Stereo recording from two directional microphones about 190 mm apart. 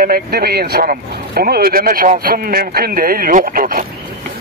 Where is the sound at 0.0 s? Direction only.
50° right (ahead or behind).